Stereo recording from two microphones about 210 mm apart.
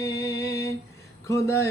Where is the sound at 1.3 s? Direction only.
15° left (ahead or behind).